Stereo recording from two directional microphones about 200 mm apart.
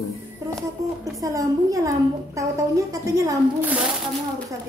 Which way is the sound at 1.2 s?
15° right (ahead or behind).